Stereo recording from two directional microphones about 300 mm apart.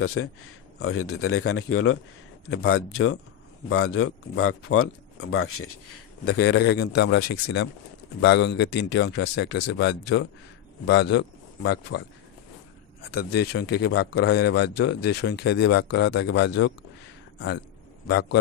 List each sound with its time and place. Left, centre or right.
0.0 s a man's voice: left
13.0 s a man's voice: left
18.0 s a man's voice: left